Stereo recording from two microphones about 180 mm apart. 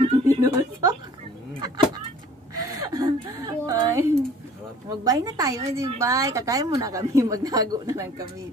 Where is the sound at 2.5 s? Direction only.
20° right (ahead or behind).